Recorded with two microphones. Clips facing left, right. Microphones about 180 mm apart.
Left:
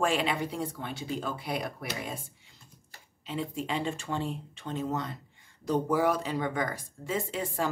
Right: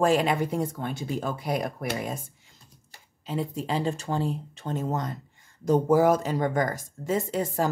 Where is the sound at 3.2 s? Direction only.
40° right (ahead or behind).